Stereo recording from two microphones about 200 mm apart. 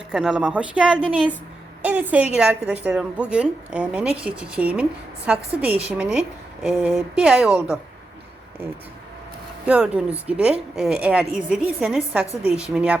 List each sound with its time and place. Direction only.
0.1 s a woman's voice: 5° right (ahead or behind)
9.6 s a woman's voice: 5° right (ahead or behind)